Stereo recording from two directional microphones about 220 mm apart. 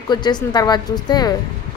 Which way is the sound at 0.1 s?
20° left (ahead or behind).